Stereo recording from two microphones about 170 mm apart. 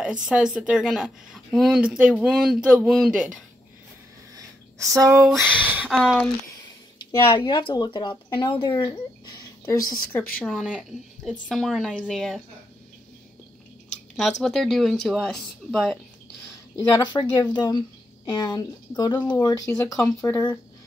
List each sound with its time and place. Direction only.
0.0 s a woman's voice: 5° right (ahead or behind)
4.9 s speech: 20° right (ahead or behind)
5.2 s speech: 10° right (ahead or behind)
5.9 s a woman's voice: centre (ahead or behind)
7.1 s speech: 25° left (ahead or behind)
10.4 s a woman's voice: centre (ahead or behind)
14.4 s a woman's voice: 5° left (ahead or behind)
16.7 s speech: 25° left (ahead or behind)